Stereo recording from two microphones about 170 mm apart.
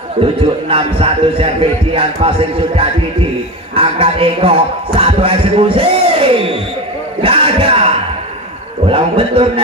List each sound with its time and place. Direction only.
0.2 s speech: 35° right (ahead or behind)
7.2 s music: 35° right (ahead or behind)
8.8 s speech: 30° right (ahead or behind)